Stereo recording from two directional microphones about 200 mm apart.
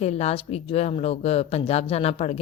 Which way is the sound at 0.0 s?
35° left (ahead or behind).